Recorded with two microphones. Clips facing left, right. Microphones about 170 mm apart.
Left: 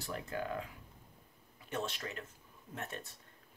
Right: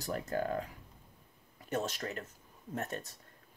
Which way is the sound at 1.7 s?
40° right (ahead or behind).